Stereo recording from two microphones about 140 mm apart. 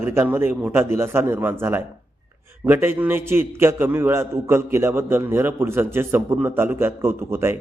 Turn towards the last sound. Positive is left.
turn(degrees=-15)  # may be behind; listen again after turning